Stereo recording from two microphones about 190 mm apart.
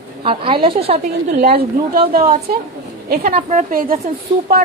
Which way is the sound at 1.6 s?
50° right (ahead or behind).